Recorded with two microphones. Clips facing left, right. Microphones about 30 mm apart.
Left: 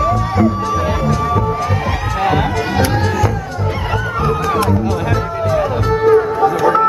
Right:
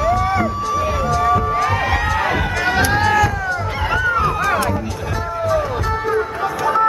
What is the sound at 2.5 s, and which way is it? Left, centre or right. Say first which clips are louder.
Music: even; centre.